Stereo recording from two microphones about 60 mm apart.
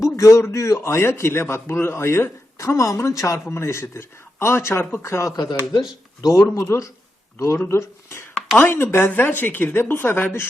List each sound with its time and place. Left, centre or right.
0.0 s a man's voice: left
2.6 s speech: left
3.5 s a man's voice: left
6.2 s speech: left
7.7 s a man's voice: left
8.5 s speech: left